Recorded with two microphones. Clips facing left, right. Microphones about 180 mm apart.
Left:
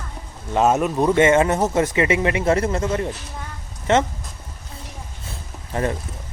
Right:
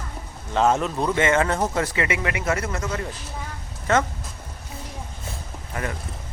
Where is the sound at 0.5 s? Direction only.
15° left (ahead or behind).